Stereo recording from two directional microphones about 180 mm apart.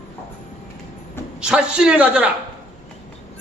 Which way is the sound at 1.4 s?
5° right (ahead or behind).